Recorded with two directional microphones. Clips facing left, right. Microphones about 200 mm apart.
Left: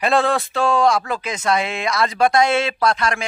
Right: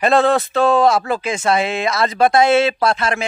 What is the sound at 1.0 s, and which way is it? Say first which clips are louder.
Speech: right 5 dB; 30° right (ahead or behind).